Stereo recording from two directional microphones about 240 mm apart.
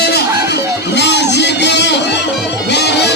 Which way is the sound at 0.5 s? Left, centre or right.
Left.